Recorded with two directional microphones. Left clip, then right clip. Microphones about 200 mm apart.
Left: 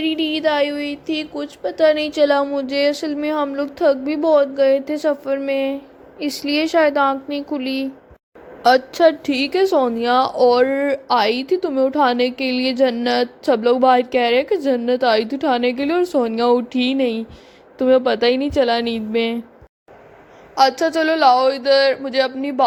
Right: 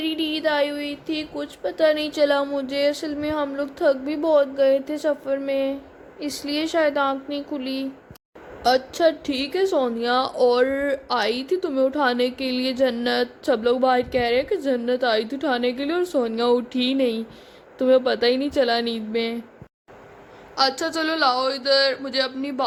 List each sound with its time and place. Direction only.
0.0 s a woman's voice: 15° left (ahead or behind)
20.6 s a woman's voice: 15° left (ahead or behind)